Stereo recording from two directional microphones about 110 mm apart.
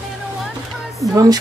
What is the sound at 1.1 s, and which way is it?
Speech, 30° right (ahead or behind).